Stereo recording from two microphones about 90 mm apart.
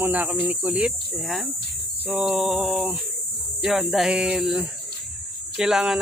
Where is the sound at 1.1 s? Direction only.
Centre (ahead or behind).